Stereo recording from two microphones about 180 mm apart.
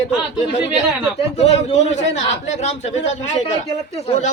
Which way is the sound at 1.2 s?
35° left (ahead or behind).